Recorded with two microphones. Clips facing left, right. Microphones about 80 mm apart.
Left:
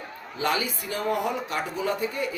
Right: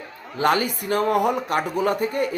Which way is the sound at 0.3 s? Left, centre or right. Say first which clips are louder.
Right 6 dB; right.